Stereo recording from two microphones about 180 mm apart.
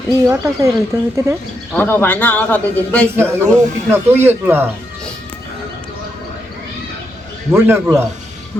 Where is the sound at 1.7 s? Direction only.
10° left (ahead or behind).